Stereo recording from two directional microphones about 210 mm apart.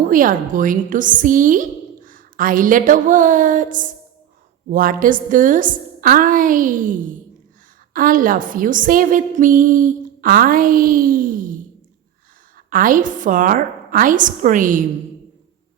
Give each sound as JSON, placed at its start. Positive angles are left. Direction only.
{"t": 0.1, "sound": "a woman's voice", "side_deg": -40}
{"t": 12.7, "sound": "a woman's voice", "side_deg": -40}